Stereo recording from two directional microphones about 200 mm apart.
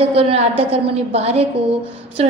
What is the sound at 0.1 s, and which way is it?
Speech, 30° right (ahead or behind).